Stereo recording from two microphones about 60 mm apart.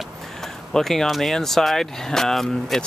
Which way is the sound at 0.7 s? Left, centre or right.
Centre.